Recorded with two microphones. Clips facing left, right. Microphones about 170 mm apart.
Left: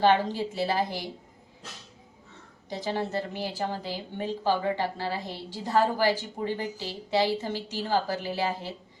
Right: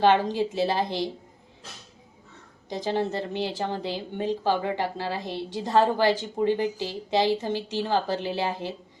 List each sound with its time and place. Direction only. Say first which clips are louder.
0.0 s speech: right 2 dB; 20° right (ahead or behind)
2.6 s speech: right 4 dB; 20° right (ahead or behind)